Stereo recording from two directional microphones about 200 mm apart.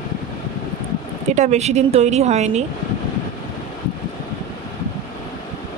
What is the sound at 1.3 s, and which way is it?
Speech, 35° right (ahead or behind).